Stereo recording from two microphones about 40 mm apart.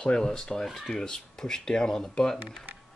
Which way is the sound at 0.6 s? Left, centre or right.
Centre.